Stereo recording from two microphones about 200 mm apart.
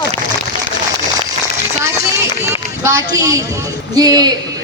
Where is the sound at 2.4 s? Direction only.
15° right (ahead or behind).